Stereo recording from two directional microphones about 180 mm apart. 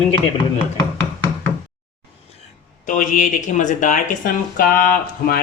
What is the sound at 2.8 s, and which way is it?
Speech, 45° left (ahead or behind).